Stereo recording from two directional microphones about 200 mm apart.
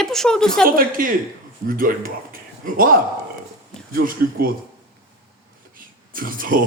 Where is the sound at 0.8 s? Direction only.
45° right (ahead or behind).